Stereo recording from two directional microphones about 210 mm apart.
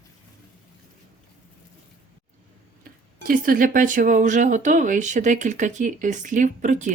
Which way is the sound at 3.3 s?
40° right (ahead or behind).